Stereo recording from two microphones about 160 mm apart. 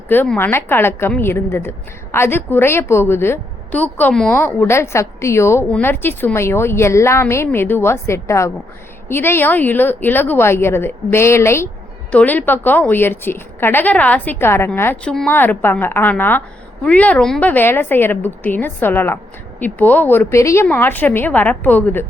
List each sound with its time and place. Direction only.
0.1 s a woman's voice: 10° left (ahead or behind)